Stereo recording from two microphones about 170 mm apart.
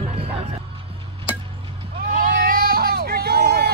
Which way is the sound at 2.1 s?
55° right (ahead or behind).